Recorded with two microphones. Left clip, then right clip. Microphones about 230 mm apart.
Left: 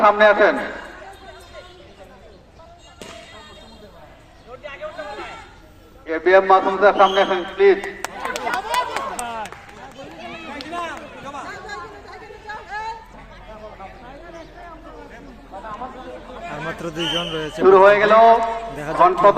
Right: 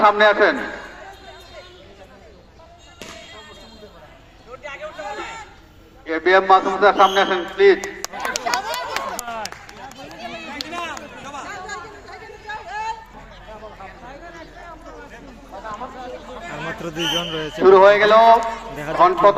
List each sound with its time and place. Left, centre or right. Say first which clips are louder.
0.0 s a man's voice: left 1 dB; right
4.6 s chatter: even; right
6.1 s a sound: even; right
10.0 s run: right 1 dB; right
11.4 s chatter: right 1 dB; centre
15.5 s run: even; right
17.2 s a man's voice: even; centre
17.6 s a man's voice: right 1 dB; right